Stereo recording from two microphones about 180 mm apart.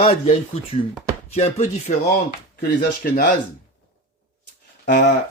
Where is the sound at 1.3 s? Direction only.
35° left (ahead or behind).